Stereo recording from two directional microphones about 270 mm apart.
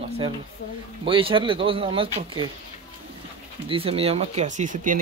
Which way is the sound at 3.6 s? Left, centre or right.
Right.